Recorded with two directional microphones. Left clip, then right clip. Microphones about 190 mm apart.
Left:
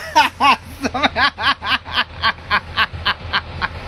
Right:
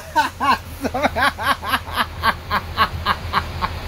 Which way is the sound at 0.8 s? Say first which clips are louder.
Left 2 dB; 15° right (ahead or behind).